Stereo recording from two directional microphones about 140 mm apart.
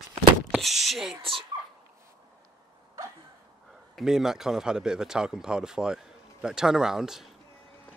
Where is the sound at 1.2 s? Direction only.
40° right (ahead or behind).